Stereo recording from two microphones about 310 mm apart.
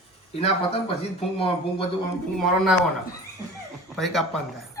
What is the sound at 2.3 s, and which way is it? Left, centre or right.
Speech, centre.